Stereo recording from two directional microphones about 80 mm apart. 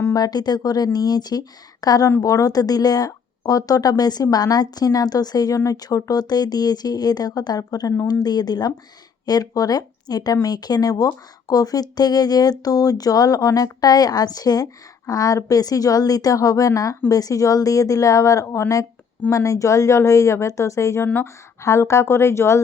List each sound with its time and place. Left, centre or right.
0.1 s speech: left